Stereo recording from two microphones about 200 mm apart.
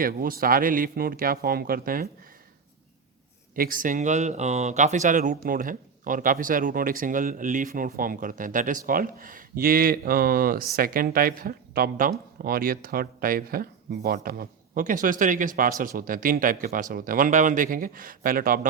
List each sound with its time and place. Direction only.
0.0 s speech: 45° right (ahead or behind)
3.5 s speech: 45° right (ahead or behind)